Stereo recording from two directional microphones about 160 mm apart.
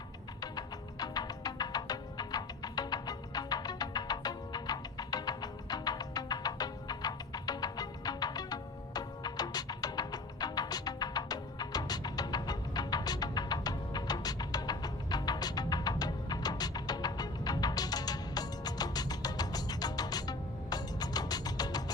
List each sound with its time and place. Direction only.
0.5 s music: 25° left (ahead or behind)